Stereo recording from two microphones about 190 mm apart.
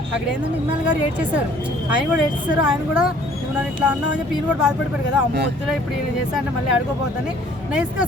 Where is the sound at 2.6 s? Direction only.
5° right (ahead or behind).